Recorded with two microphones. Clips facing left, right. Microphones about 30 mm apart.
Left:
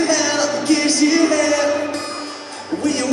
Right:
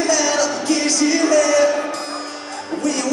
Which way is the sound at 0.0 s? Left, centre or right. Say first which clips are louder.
Even; centre.